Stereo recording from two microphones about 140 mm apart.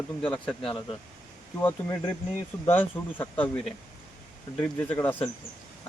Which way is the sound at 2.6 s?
15° left (ahead or behind).